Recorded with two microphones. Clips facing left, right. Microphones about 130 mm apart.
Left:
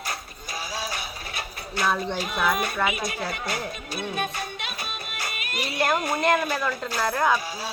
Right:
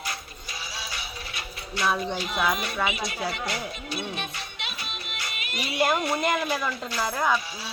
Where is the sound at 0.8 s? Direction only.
45° left (ahead or behind).